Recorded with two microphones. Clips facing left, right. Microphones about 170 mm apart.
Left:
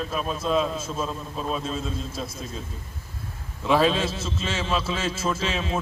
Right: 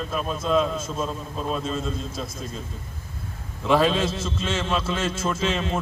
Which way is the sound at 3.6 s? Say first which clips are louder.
Right 1 dB; centre (ahead or behind).